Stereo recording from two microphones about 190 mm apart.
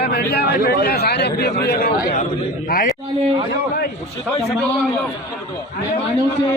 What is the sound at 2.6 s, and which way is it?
Speech, 50° left (ahead or behind).